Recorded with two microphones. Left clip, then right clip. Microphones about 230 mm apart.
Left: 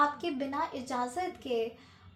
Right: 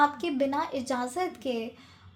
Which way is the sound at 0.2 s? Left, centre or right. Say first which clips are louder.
Right 5 dB; right.